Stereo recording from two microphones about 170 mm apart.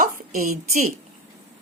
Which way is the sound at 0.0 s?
45° right (ahead or behind).